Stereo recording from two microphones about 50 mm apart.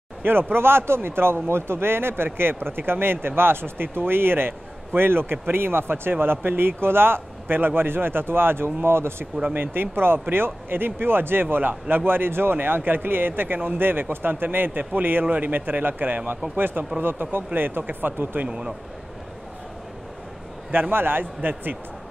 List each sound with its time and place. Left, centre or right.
0.2 s speech: right
9.2 s speech: right
20.9 s speech: right